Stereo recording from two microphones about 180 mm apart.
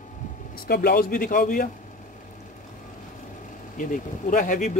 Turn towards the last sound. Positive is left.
turn(degrees=45)  # may be behind; listen again after turning